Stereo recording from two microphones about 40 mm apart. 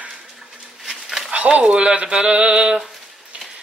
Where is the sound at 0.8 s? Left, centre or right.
Centre.